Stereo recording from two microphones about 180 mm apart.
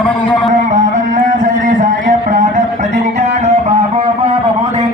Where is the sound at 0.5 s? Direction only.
45° right (ahead or behind).